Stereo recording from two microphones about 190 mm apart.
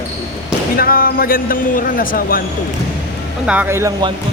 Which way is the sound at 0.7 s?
50° left (ahead or behind).